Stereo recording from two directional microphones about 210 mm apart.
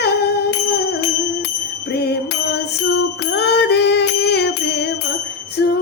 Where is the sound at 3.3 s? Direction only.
55° left (ahead or behind).